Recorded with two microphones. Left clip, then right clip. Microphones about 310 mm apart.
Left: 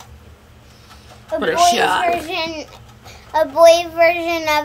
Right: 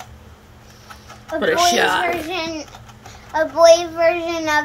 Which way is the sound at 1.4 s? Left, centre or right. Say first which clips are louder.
Left 1 dB; centre.